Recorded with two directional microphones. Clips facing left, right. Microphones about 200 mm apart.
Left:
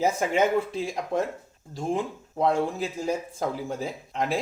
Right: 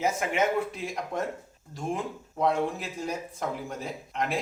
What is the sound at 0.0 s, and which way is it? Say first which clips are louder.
Speech: left 3 dB; 30° left (ahead or behind).